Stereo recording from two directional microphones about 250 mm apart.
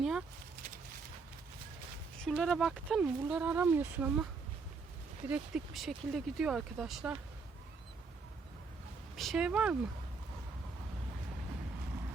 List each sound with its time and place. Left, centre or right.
0.0 s a sound: centre
2.2 s speech: centre
5.3 s speech: centre
9.1 s speech: centre